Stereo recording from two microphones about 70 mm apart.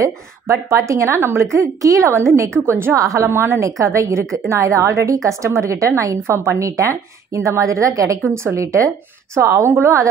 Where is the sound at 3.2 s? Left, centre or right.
Right.